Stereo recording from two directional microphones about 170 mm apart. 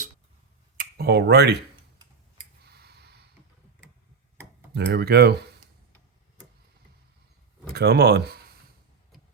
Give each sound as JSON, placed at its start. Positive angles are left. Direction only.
{"t": 0.8, "sound": "speech", "side_deg": -70}
{"t": 2.6, "sound": "gasp", "side_deg": -75}
{"t": 4.7, "sound": "speech", "side_deg": -75}
{"t": 7.7, "sound": "speech", "side_deg": -70}